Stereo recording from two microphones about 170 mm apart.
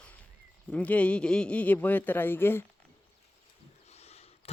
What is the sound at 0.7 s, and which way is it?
Speech, 10° left (ahead or behind).